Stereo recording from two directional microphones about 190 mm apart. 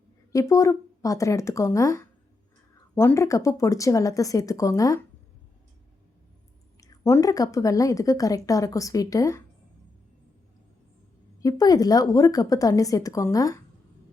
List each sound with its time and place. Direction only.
0.3 s a woman's voice: 15° left (ahead or behind)
6.7 s a woman's voice: 15° left (ahead or behind)
11.3 s a woman's voice: 20° left (ahead or behind)